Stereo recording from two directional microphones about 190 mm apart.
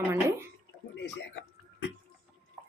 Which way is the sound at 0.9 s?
65° left (ahead or behind).